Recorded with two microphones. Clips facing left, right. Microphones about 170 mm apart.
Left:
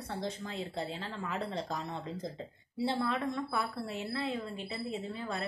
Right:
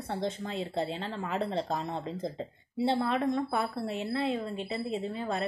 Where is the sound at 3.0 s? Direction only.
50° right (ahead or behind).